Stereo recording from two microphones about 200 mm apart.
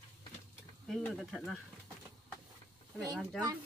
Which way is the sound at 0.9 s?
Centre (ahead or behind).